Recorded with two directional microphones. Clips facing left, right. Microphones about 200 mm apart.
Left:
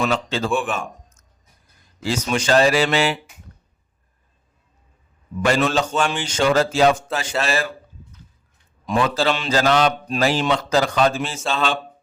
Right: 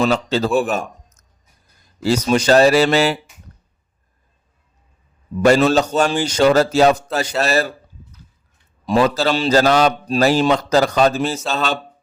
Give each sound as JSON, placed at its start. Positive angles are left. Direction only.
{"t": 0.0, "sound": "a man's voice", "side_deg": -40}
{"t": 5.4, "sound": "a man's voice", "side_deg": -40}
{"t": 8.9, "sound": "a man's voice", "side_deg": -40}